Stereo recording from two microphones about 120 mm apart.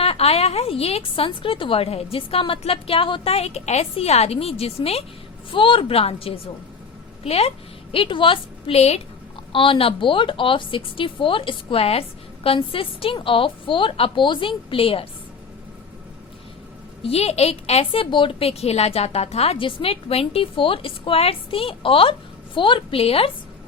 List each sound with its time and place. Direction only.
0.0 s a woman's voice: 55° left (ahead or behind)
5.5 s a woman's voice: 45° left (ahead or behind)
7.9 s speech: 45° left (ahead or behind)
9.5 s speech: 45° left (ahead or behind)
17.0 s speech: 55° left (ahead or behind)